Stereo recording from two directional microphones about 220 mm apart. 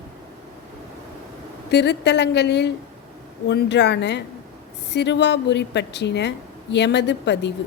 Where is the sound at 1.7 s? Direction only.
50° left (ahead or behind).